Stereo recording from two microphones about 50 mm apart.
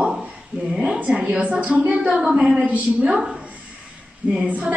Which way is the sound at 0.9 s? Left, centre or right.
Right.